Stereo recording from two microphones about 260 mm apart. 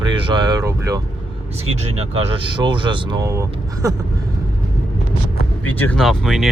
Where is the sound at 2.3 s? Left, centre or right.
Centre.